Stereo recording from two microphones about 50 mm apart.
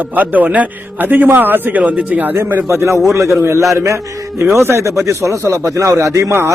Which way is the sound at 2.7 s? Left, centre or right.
Right.